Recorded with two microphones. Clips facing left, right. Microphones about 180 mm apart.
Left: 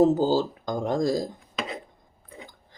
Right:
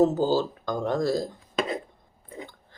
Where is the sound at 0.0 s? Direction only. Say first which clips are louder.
Left 1 dB; 15° left (ahead or behind).